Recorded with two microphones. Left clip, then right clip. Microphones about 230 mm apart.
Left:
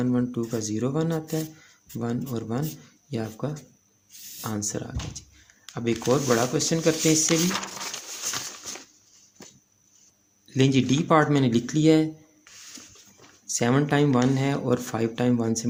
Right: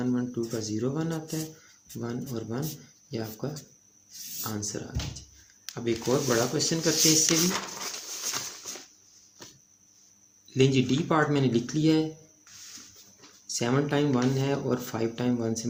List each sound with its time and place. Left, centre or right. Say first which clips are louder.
0.0 s speech: left 4 dB; left
7.8 s a sound: left 2 dB; left
10.5 s speech: left 1 dB; left
13.5 s speech: left 4 dB; left